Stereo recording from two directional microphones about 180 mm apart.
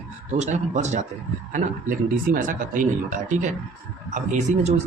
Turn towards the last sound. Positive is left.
turn(degrees=-40)  # may be behind; listen again after turning